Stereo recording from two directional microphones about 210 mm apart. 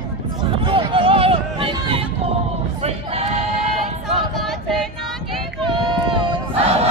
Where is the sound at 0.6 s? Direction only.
25° right (ahead or behind).